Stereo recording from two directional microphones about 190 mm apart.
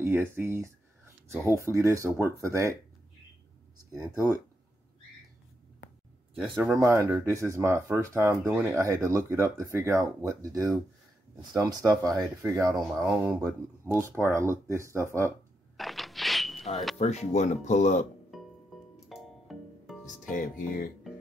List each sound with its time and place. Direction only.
0.0 s speech: 10° right (ahead or behind)
6.3 s speech: centre (ahead or behind)
7.0 s speech: 10° right (ahead or behind)
13.1 s speech: 5° right (ahead or behind)
15.8 s a sound: centre (ahead or behind)
17.0 s speech: 35° left (ahead or behind)
19.0 s music: centre (ahead or behind)
20.2 s music: 45° left (ahead or behind)